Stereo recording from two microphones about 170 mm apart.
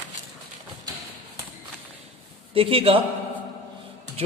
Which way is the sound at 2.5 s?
35° right (ahead or behind).